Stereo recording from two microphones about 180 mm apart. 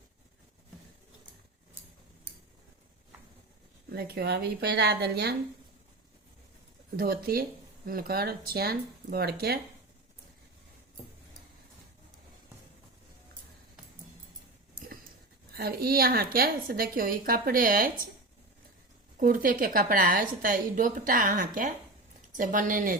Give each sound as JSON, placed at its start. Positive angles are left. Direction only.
{"t": 3.9, "sound": "a woman's voice", "side_deg": -60}
{"t": 6.9, "sound": "a woman's voice", "side_deg": -55}
{"t": 15.5, "sound": "a woman's voice", "side_deg": -60}
{"t": 19.1, "sound": "a woman's voice", "side_deg": -50}